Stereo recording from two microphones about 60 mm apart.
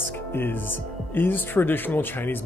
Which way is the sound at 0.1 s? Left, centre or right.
Left.